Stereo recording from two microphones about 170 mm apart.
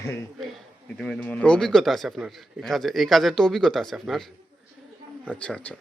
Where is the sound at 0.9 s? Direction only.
5° left (ahead or behind).